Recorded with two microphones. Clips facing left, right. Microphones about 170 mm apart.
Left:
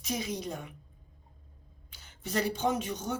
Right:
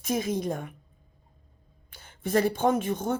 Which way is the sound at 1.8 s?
50° right (ahead or behind).